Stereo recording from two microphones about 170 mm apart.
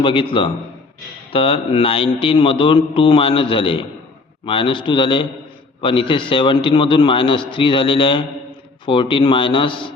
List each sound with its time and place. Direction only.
0.0 s a man's voice: 30° left (ahead or behind)